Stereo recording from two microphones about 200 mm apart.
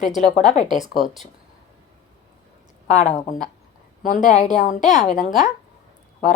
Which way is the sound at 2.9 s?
35° left (ahead or behind).